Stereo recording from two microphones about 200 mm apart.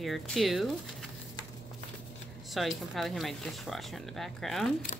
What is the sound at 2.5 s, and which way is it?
A woman's voice, centre (ahead or behind).